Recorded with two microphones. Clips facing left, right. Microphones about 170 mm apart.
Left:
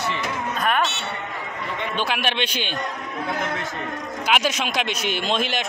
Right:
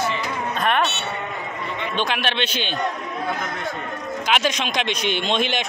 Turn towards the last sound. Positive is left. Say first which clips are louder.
# right 2 dB
turn(degrees=0)  # may be behind; listen again after turning